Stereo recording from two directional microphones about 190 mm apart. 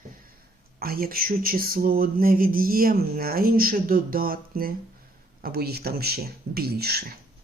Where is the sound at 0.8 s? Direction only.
50° right (ahead or behind).